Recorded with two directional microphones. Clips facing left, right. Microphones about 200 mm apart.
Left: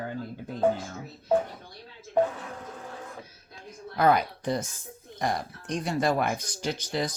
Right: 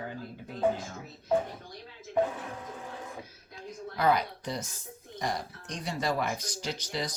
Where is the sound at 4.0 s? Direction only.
50° left (ahead or behind).